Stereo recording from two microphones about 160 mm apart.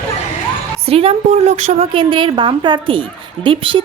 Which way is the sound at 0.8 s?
40° right (ahead or behind).